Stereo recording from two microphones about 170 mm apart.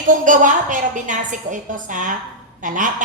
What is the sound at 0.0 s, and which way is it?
A woman's voice, 50° right (ahead or behind).